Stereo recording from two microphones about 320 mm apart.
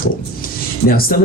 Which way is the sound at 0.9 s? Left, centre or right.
Left.